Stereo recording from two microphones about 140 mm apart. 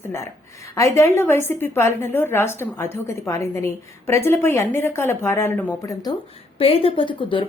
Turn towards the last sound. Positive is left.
turn(degrees=35)  # may be behind; listen again after turning